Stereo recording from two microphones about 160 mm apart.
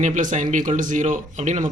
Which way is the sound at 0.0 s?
50° right (ahead or behind).